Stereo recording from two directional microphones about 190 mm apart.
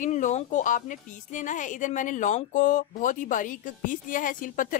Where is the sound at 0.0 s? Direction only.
40° left (ahead or behind).